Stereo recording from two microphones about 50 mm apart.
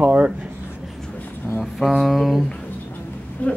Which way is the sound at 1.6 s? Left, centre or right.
Centre.